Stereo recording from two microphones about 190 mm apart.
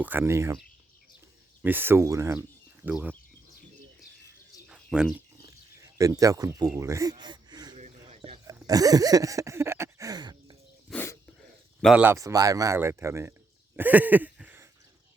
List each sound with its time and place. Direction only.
0.0 s speech: 10° right (ahead or behind)
1.6 s speech: 10° right (ahead or behind)
4.6 s bird: 5° right (ahead or behind)
5.8 s speech: 15° right (ahead or behind)
8.1 s a sound: 30° right (ahead or behind)
8.6 s a sound: 20° right (ahead or behind)
10.8 s dog: 10° left (ahead or behind)
11.8 s speech: 5° right (ahead or behind)
13.7 s a sound: 10° right (ahead or behind)